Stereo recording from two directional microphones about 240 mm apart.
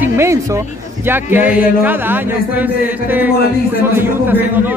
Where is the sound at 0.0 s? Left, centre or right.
Centre.